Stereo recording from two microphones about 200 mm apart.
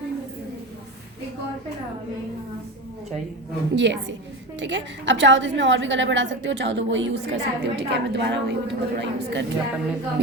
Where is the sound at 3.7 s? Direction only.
65° right (ahead or behind).